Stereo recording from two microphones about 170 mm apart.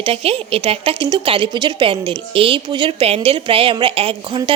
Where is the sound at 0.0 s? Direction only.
35° right (ahead or behind).